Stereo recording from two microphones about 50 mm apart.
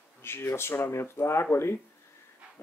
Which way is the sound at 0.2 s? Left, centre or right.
Left.